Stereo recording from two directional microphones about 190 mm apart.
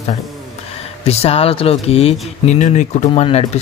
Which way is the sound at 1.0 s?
30° left (ahead or behind).